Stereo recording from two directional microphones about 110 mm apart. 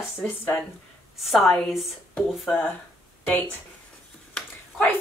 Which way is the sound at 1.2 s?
Centre (ahead or behind).